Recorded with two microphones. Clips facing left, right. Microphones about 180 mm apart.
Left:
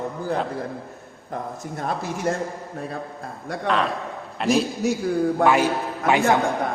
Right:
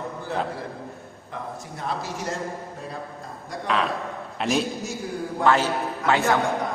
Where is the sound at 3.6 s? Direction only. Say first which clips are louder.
Left 2 dB; centre (ahead or behind).